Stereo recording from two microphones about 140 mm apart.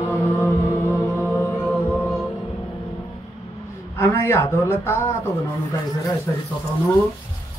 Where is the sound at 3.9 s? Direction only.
20° left (ahead or behind).